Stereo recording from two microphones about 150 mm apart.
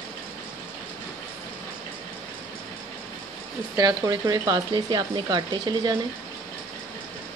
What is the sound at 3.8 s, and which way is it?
Speech, 25° right (ahead or behind).